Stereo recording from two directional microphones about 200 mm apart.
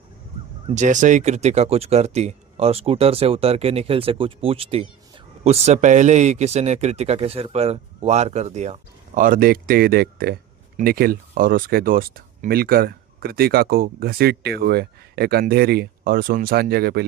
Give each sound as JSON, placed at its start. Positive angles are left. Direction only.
{"t": 0.7, "sound": "speech", "side_deg": -35}